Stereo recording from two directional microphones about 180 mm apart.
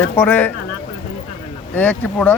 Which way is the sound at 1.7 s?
10° left (ahead or behind).